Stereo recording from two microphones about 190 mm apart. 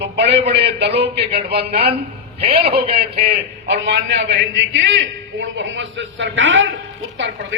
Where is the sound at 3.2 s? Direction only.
65° right (ahead or behind); by 6.6 s 90° right.